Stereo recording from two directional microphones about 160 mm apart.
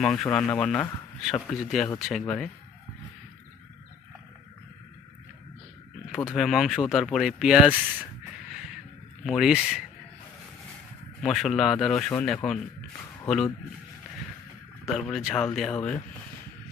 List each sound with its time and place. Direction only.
0.0 s speech: 5° left (ahead or behind)
6.1 s speech: centre (ahead or behind)
9.2 s speech: centre (ahead or behind)
11.2 s speech: centre (ahead or behind)
14.9 s speech: centre (ahead or behind)